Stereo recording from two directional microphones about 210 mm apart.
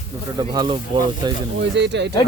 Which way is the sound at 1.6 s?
55° right (ahead or behind).